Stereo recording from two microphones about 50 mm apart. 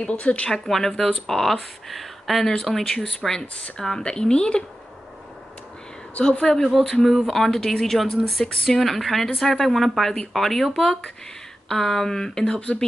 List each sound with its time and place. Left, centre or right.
0.0 s speech: left
0.5 s speech: centre
6.2 s speech: centre
6.6 s speech: centre
11.7 s speech: centre